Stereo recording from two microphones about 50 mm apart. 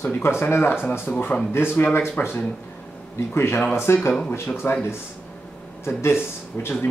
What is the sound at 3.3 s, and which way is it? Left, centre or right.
Speech, left.